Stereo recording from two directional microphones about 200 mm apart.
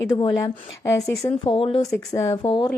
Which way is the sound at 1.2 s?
25° left (ahead or behind).